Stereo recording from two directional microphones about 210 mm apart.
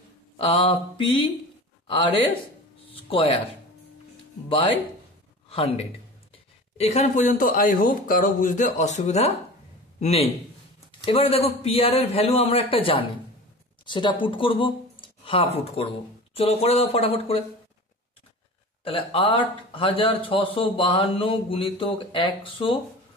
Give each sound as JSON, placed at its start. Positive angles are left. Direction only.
{"t": 0.4, "sound": "speech", "side_deg": 25}
{"t": 2.9, "sound": "music", "side_deg": 25}
{"t": 6.8, "sound": "a man's voice", "side_deg": 30}
{"t": 18.9, "sound": "speech", "side_deg": 25}